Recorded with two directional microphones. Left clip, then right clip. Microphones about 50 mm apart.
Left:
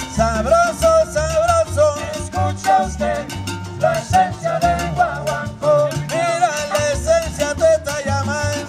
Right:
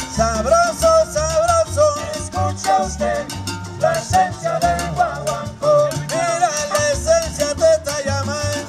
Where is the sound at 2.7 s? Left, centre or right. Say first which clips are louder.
Left 2 dB; right.